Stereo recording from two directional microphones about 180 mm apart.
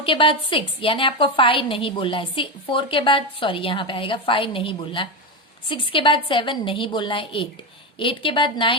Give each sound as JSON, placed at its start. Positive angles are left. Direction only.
{"t": 0.0, "sound": "a woman's voice", "side_deg": 30}